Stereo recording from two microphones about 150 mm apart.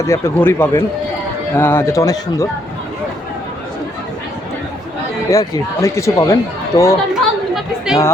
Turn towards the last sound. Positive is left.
turn(degrees=-5)  # may be behind; listen again after turning